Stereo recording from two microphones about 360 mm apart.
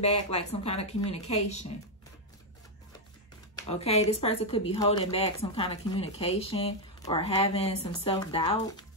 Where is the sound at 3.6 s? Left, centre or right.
Centre.